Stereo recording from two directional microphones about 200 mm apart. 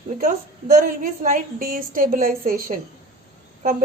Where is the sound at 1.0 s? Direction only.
45° right (ahead or behind).